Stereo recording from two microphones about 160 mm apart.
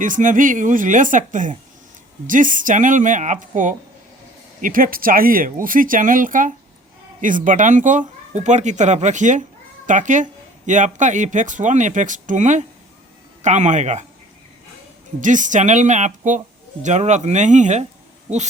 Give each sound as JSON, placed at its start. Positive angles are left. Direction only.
{"t": 0.0, "sound": "speech", "side_deg": -55}
{"t": 15.2, "sound": "speech", "side_deg": -55}